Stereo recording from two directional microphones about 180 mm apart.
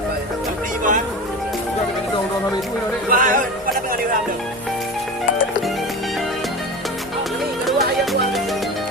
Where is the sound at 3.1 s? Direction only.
50° right (ahead or behind).